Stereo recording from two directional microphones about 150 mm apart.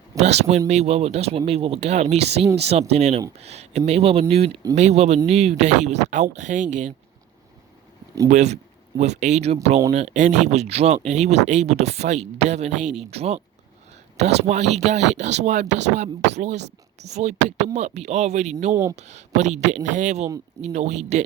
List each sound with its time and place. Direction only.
0.2 s speech: 45° right (ahead or behind)
8.3 s speech: 50° right (ahead or behind)
18.7 s speech: 20° right (ahead or behind)
18.9 s speech: 50° right (ahead or behind)